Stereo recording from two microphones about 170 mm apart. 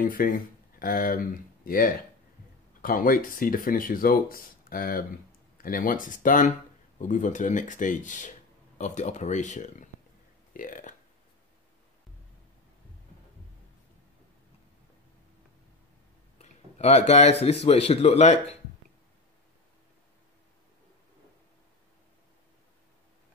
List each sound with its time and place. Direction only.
0.0 s speech: 55° left (ahead or behind)
10.5 s burping: 55° left (ahead or behind)
16.3 s a sound: 40° left (ahead or behind)
17.6 s speech: 40° left (ahead or behind)